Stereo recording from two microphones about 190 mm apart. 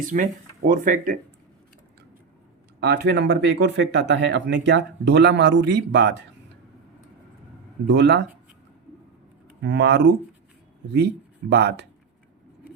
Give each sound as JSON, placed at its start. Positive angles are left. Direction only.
{"t": 0.0, "sound": "speech", "side_deg": -45}
{"t": 2.8, "sound": "speech", "side_deg": -60}
{"t": 7.9, "sound": "speech", "side_deg": -65}
{"t": 9.6, "sound": "speech", "side_deg": -65}